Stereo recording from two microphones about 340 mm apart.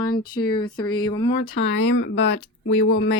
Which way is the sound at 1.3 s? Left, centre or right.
Left.